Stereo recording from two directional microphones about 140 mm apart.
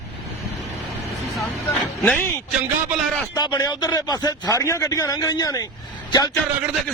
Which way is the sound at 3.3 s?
30° left (ahead or behind).